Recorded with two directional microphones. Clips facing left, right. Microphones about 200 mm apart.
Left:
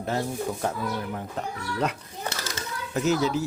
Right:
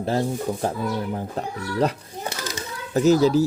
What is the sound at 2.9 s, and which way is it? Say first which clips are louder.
Speech: right 8 dB; 35° right (ahead or behind).